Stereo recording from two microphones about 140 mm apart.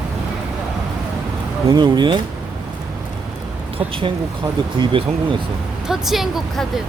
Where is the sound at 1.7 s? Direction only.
30° right (ahead or behind).